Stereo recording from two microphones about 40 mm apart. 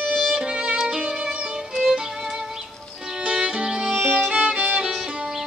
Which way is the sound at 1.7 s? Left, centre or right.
Centre.